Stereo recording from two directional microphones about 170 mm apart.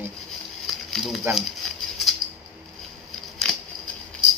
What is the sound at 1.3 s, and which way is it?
Speech, 15° right (ahead or behind).